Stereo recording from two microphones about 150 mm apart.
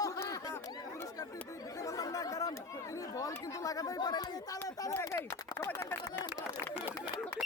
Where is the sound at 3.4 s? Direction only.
20° left (ahead or behind).